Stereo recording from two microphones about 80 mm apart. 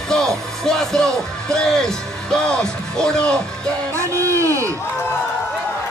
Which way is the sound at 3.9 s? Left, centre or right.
Right.